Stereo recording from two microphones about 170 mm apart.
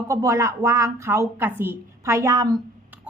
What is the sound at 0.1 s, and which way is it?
A woman's voice, 20° right (ahead or behind).